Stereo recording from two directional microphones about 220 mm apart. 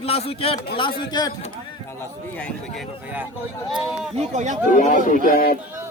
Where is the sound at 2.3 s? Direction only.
5° left (ahead or behind).